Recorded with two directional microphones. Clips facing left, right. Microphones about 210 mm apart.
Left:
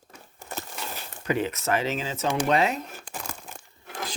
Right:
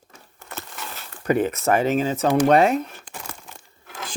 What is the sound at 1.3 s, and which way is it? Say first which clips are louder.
Speech: right 6 dB; 50° right (ahead or behind).